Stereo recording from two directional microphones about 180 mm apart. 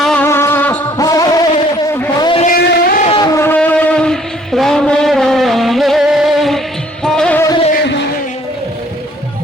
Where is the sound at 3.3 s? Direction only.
10° left (ahead or behind).